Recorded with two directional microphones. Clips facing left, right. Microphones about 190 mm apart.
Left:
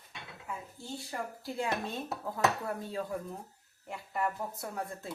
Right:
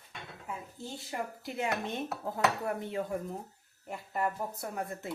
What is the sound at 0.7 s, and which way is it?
Speech, 20° right (ahead or behind).